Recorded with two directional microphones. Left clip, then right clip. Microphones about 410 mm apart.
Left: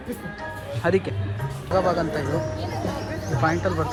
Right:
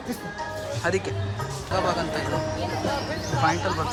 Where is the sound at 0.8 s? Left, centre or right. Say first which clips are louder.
Left 4 dB; centre.